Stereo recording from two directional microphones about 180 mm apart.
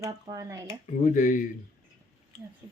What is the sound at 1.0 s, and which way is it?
Speech, 45° left (ahead or behind).